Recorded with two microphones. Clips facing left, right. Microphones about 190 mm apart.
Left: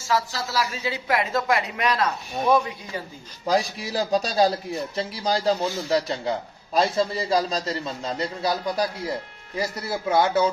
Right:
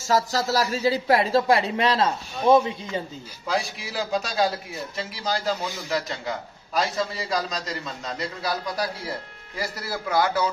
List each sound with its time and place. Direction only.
0.1 s speech: 40° right (ahead or behind); by 3.0 s 25° right (ahead or behind)
3.4 s a man's voice: 40° left (ahead or behind)